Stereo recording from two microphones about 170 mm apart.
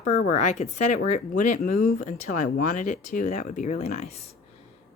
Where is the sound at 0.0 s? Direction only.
45° left (ahead or behind).